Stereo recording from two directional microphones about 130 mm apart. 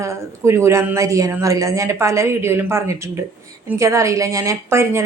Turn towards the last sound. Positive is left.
turn(degrees=-20)  # may be behind; listen again after turning